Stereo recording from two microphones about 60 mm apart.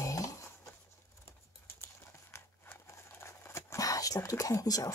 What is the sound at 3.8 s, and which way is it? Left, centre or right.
Whispering, left.